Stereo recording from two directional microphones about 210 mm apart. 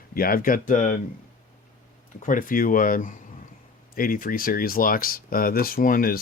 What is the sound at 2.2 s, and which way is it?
Speech, 40° left (ahead or behind).